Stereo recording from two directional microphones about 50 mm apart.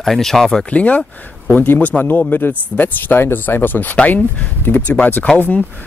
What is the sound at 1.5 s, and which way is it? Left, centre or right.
Speech, left.